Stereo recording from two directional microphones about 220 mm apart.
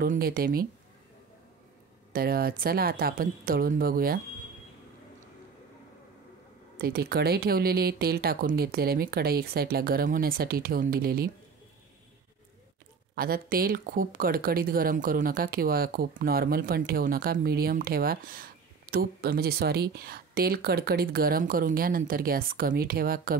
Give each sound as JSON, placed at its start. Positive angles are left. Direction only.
{"t": 0.0, "sound": "speech", "side_deg": -40}
{"t": 2.1, "sound": "speech", "side_deg": -45}
{"t": 6.8, "sound": "speech", "side_deg": -45}
{"t": 13.1, "sound": "speech", "side_deg": -40}